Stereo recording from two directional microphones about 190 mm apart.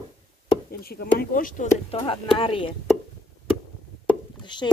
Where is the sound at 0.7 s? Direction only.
55° left (ahead or behind).